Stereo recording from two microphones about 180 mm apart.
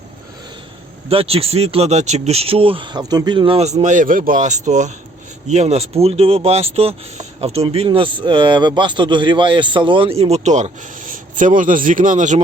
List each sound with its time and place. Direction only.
1.0 s speech: 30° right (ahead or behind)